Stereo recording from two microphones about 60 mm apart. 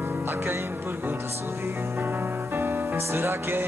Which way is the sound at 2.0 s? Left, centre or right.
Right.